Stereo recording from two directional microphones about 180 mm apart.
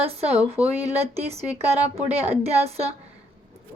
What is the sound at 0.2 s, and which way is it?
Speech, 35° right (ahead or behind).